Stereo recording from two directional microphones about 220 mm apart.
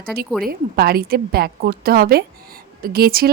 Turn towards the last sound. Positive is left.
turn(degrees=-45)  # may be behind; listen again after turning